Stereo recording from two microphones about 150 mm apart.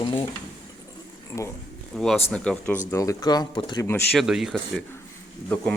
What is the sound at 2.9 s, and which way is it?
Speech, 20° left (ahead or behind).